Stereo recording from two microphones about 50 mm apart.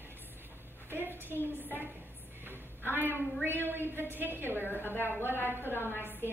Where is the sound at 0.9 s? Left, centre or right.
Right.